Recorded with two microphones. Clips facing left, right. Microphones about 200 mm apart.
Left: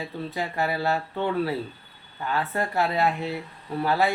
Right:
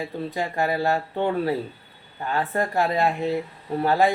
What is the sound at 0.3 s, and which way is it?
Speech, 45° right (ahead or behind).